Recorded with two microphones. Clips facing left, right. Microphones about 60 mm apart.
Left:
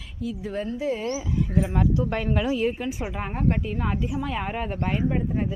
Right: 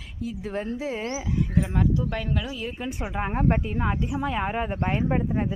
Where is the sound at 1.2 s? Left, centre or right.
Centre.